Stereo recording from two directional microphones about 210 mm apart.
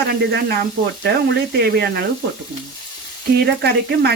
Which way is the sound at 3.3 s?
50° right (ahead or behind).